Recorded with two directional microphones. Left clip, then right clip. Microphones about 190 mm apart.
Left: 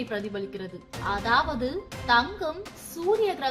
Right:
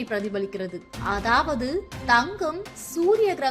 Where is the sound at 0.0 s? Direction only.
20° right (ahead or behind).